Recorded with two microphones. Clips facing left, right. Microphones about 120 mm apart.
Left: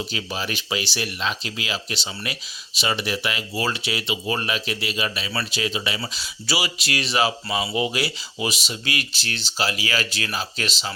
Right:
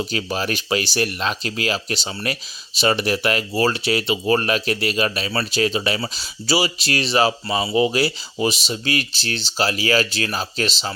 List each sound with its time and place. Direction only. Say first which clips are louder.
0.0 s speech: right 5 dB; 45° right (ahead or behind)